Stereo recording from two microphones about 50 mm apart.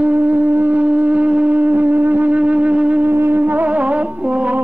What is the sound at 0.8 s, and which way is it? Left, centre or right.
Music, right.